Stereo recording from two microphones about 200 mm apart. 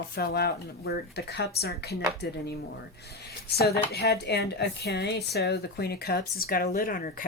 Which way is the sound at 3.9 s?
55° left (ahead or behind).